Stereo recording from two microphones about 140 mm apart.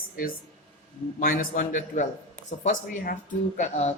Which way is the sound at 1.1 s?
80° left.